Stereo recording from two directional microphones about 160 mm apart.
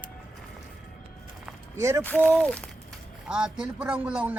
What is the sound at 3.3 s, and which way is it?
A man's voice, 5° right (ahead or behind).